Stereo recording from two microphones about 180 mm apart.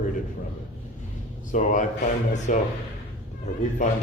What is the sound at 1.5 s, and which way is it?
Speech, 45° left (ahead or behind).